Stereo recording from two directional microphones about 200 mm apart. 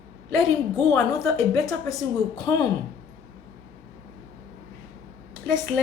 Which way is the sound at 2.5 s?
15° left (ahead or behind).